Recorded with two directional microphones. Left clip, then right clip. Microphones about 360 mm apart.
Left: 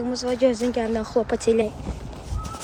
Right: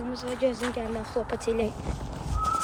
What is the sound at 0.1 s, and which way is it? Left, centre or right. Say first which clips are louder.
Speech: left 7 dB; left.